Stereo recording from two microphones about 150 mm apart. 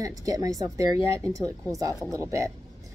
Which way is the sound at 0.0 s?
25° right (ahead or behind).